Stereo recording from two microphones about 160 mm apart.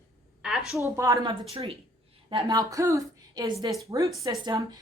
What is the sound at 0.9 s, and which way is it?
Speech, 20° right (ahead or behind).